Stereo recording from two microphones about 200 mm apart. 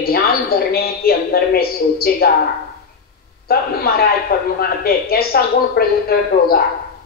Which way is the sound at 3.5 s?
50° left (ahead or behind).